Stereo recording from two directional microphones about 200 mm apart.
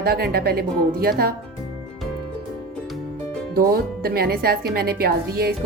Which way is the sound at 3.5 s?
50° right (ahead or behind).